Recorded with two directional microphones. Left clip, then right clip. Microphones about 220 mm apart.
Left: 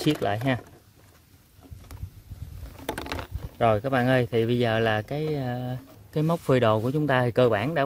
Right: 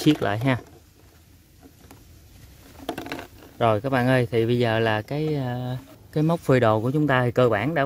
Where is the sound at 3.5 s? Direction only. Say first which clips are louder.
Right 1 dB; centre (ahead or behind).